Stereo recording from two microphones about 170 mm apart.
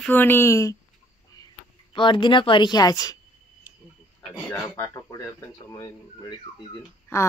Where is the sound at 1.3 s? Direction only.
20° left (ahead or behind).